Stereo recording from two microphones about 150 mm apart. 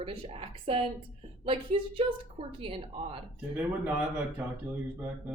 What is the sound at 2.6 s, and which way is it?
Speech, 40° right (ahead or behind).